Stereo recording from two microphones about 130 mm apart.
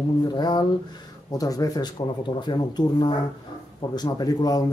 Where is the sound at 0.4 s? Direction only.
35° left (ahead or behind).